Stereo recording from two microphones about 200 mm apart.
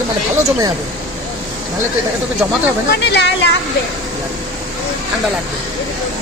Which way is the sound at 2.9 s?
55° left (ahead or behind).